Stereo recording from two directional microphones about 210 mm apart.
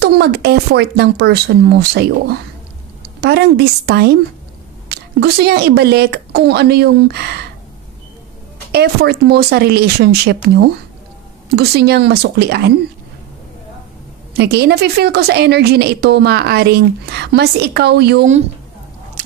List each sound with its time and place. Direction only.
0.0 s a woman's voice: 50° right (ahead or behind)
8.7 s a woman's voice: 50° right (ahead or behind)
14.3 s a woman's voice: 50° right (ahead or behind)
19.2 s duck: 35° right (ahead or behind)